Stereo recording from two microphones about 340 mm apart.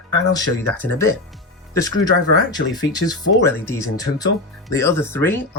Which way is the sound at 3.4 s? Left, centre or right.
Centre.